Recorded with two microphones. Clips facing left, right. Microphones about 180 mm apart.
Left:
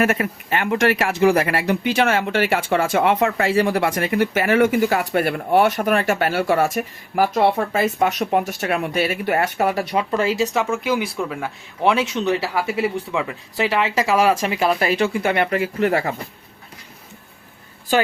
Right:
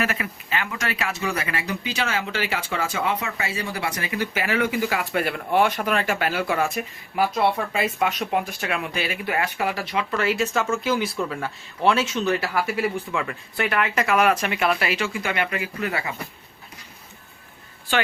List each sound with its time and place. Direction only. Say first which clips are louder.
0.0 s speech: left 7 dB; 50° left (ahead or behind); by 10.2 s 35° left (ahead or behind)
10.4 s speech: left 3 dB; 15° left (ahead or behind); by 16.1 s 45° left (ahead or behind)
17.9 s a woman's voice: left 5 dB; 40° left (ahead or behind)